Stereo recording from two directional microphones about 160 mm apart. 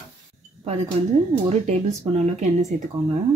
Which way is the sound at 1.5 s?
45° right (ahead or behind).